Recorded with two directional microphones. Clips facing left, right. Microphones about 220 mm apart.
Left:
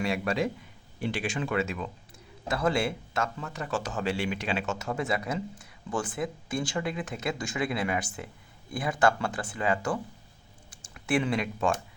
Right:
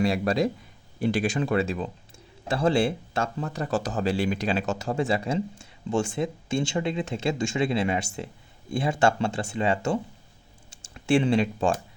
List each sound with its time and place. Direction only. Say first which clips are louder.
0.0 s speech: right 5 dB; 35° right (ahead or behind)